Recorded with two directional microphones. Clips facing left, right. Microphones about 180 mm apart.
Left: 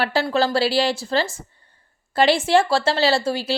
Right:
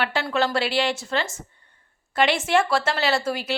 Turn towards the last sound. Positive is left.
turn(degrees=30)  # may be behind; listen again after turning